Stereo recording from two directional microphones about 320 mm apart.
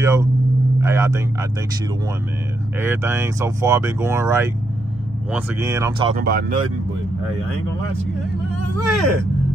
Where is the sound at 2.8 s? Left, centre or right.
Centre.